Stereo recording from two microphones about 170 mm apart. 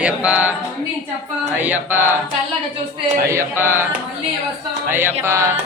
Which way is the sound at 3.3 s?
15° right (ahead or behind).